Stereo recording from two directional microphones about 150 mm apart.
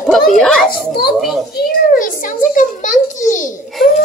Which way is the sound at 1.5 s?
75° left (ahead or behind).